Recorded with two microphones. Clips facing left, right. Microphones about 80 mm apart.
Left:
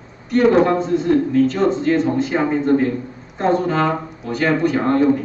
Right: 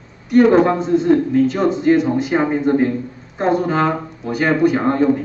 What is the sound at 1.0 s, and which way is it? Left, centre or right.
A man's voice, centre.